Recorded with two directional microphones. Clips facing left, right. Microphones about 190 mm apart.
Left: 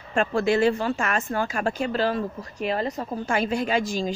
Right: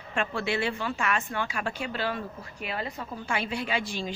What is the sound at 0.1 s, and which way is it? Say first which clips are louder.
Speech: left 8 dB; 40° left (ahead or behind).